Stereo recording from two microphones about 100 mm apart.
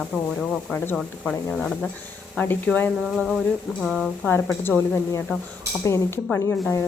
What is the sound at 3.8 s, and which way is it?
Speech, centre (ahead or behind).